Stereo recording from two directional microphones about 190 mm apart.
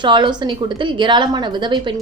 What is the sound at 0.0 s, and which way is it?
A woman's voice, 25° right (ahead or behind).